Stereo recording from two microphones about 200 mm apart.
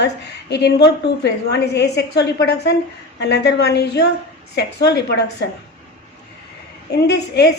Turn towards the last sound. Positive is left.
turn(degrees=55)  # may be behind; listen again after turning